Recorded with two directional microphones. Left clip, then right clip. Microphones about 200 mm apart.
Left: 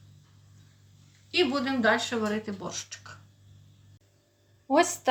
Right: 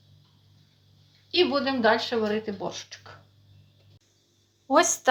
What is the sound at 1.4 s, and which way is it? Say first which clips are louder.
Speech: right 3 dB; 20° left (ahead or behind).